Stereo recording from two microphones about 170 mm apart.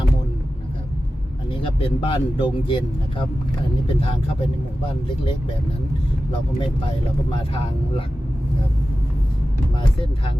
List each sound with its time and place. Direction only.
1.5 s speech: 30° left (ahead or behind)
6.6 s speech: 30° left (ahead or behind)